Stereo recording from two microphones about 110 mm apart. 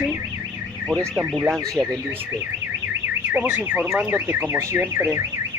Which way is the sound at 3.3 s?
15° right (ahead or behind).